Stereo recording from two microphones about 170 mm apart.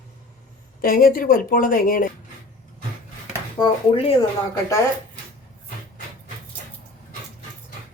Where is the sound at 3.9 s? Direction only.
35° left (ahead or behind).